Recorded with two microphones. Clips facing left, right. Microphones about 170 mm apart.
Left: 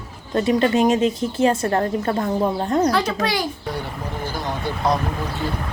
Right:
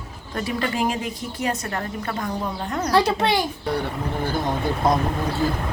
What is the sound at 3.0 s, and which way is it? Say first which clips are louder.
Speech: right 2 dB; 30° right (ahead or behind).